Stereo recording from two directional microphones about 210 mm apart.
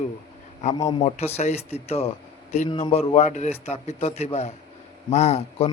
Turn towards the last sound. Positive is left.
turn(degrees=30)  # may be behind; listen again after turning